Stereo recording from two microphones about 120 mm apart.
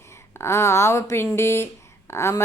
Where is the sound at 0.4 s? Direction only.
25° left (ahead or behind).